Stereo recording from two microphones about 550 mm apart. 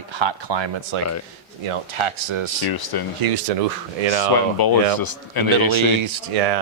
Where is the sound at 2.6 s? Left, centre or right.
Left.